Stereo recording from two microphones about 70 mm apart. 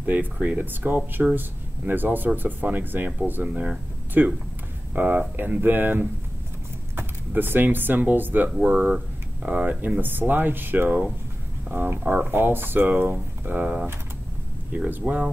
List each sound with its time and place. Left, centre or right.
0.0 s speech: right
14.9 s speech: right